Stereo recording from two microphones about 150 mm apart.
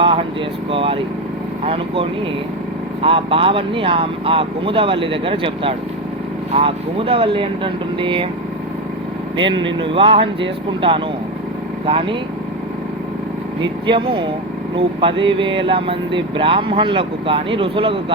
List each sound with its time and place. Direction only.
0.0 s air conditioning: 35° right (ahead or behind)
0.7 s vehicle: 35° right (ahead or behind)
1.6 s speech: 40° right (ahead or behind)
9.4 s speech: 35° right (ahead or behind)
13.6 s speech: 35° right (ahead or behind)